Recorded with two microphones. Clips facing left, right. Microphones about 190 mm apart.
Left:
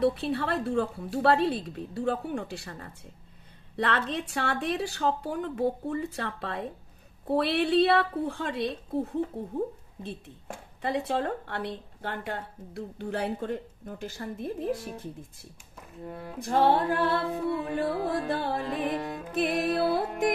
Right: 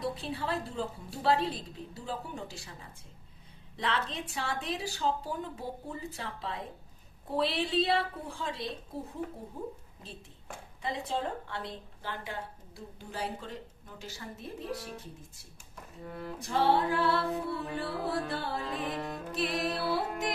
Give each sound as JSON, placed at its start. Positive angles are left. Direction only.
{"t": 0.0, "sound": "speech", "side_deg": 65}
{"t": 16.4, "sound": "music", "side_deg": 50}